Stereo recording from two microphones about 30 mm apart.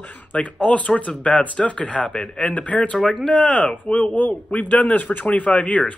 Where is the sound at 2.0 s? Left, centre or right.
Left.